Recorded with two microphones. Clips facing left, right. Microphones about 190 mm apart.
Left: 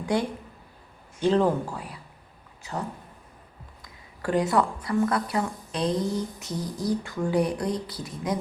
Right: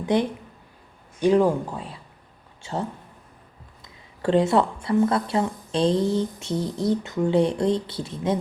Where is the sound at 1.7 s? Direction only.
25° right (ahead or behind).